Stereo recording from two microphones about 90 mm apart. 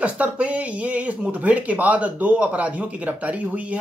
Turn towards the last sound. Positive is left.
turn(degrees=-15)  # may be behind; listen again after turning